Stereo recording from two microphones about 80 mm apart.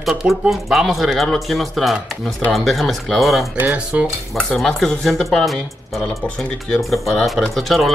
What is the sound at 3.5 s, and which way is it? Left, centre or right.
Speech, centre.